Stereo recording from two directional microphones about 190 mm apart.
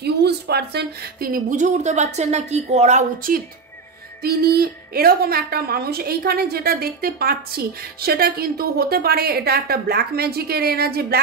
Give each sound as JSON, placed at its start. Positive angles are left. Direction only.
{"t": 0.0, "sound": "a woman's voice", "side_deg": -60}